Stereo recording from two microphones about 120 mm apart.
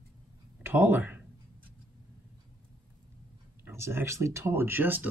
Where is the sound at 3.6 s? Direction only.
20° right (ahead or behind).